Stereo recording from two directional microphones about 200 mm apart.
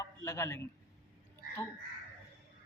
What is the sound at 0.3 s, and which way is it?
Speech, 15° left (ahead or behind).